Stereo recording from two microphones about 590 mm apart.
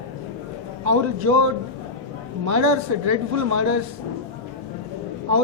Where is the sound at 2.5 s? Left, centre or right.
Right.